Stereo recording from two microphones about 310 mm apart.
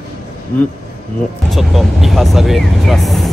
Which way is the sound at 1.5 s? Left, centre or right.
Centre.